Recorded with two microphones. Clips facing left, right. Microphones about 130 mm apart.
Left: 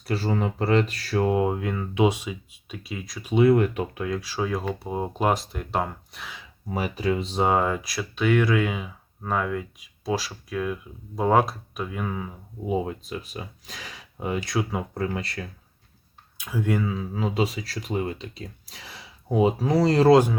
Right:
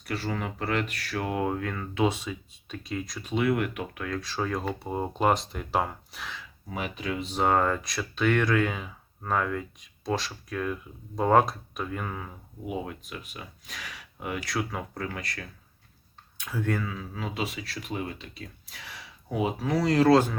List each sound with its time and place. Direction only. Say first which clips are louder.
0.0 s speech: left 6 dB; 30° left (ahead or behind); by 3.3 s centre (ahead or behind)
3.3 s speech: left 7 dB; 30° left (ahead or behind)
4.0 s speech: left 1 dB; 10° left (ahead or behind)
6.7 s speech: left 7 dB; 35° left (ahead or behind)
7.4 s speech: left 1 dB; 10° left (ahead or behind)
12.6 s speech: left 7 dB; 25° left (ahead or behind)
16.4 s speech: left 4 dB; 10° left (ahead or behind)
16.9 s speech: left 7 dB; 30° left (ahead or behind)